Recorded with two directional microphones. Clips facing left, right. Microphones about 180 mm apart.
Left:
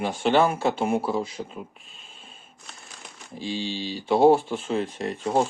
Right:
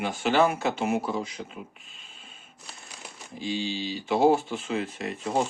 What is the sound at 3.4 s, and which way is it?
Speech, 30° left (ahead or behind).